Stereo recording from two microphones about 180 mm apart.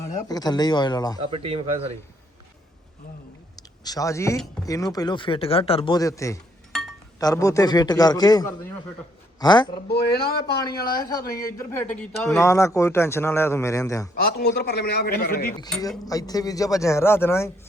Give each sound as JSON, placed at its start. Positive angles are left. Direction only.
{"t": 0.3, "sound": "speech", "side_deg": 20}
{"t": 1.2, "sound": "speech", "side_deg": -30}
{"t": 3.8, "sound": "speech", "side_deg": 20}
{"t": 9.9, "sound": "a man's voice", "side_deg": 60}
{"t": 10.4, "sound": "speech", "side_deg": 20}
{"t": 14.2, "sound": "a man's voice", "side_deg": 60}
{"t": 16.0, "sound": "speech", "side_deg": 20}